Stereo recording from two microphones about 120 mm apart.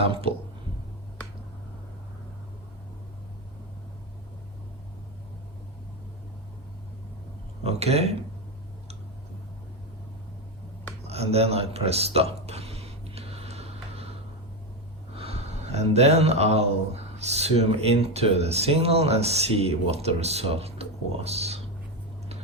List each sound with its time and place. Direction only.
0.0 s speech: 50° right (ahead or behind)
7.6 s speech: 60° right (ahead or behind)
11.0 s a sound: 60° right (ahead or behind)
15.1 s speech: 55° right (ahead or behind)